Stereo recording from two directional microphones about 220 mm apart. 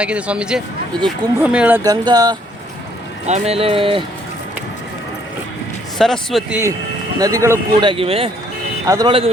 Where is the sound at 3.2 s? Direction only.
30° right (ahead or behind).